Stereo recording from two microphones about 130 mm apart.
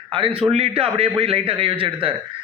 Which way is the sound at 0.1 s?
45° right (ahead or behind).